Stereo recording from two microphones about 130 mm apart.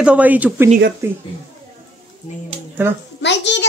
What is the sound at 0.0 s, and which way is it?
Speech, 10° right (ahead or behind).